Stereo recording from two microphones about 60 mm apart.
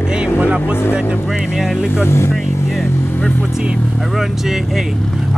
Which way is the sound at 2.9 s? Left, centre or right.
Left.